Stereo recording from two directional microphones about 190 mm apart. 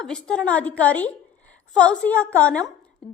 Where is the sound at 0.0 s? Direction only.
5° left (ahead or behind).